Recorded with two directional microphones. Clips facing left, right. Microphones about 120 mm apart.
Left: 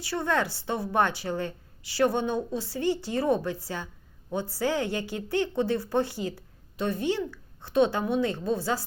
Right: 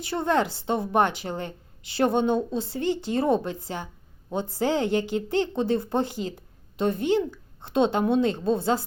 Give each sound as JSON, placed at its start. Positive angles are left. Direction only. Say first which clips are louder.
{"t": 0.1, "sound": "a woman's voice", "louder": "right 3 dB", "side_deg": -20}